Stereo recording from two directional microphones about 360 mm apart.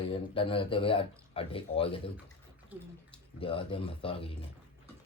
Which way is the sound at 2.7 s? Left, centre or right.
Centre.